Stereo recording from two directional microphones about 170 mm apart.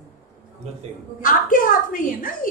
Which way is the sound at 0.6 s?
40° right (ahead or behind).